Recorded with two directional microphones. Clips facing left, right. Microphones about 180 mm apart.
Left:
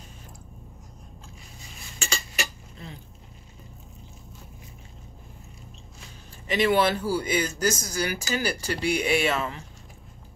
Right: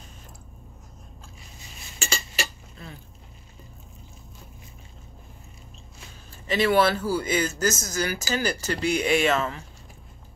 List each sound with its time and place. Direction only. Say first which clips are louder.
2.0 s cutlery: right 1 dB; 30° right (ahead or behind)
6.5 s a man's voice: right 1 dB; 15° left (ahead or behind)